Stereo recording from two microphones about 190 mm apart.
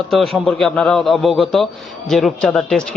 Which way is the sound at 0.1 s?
Centre (ahead or behind).